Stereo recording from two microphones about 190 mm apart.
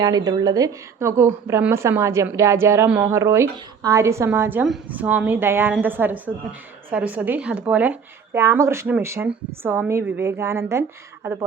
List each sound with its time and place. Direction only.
0.0 s a woman's voice: 20° right (ahead or behind)